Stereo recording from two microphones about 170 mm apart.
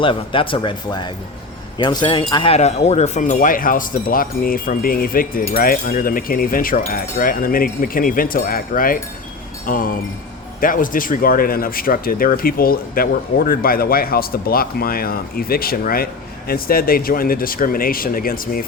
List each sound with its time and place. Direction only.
0.0 s speech: 30° left (ahead or behind); by 18.6 s 55° left (ahead or behind)